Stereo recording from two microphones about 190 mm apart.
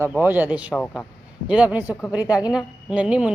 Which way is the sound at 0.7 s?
Centre (ahead or behind).